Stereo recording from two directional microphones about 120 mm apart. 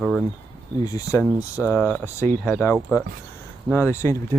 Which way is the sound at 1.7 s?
10° left (ahead or behind).